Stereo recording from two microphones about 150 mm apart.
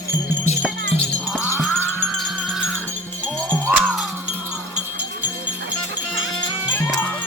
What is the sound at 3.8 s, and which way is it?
Music, 5° right (ahead or behind).